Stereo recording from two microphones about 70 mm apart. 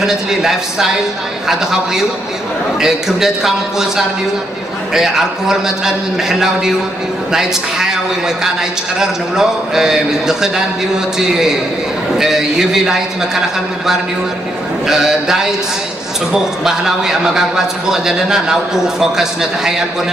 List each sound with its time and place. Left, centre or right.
0.0 s a man's voice: centre
9.0 s a man's voice: centre
14.9 s a man's voice: centre
16.6 s a man's voice: centre